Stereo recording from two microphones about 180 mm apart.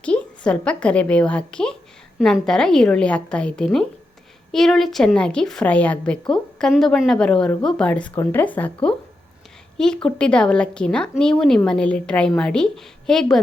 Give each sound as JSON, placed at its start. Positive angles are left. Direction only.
{"t": 0.0, "sound": "a woman's voice", "side_deg": 5}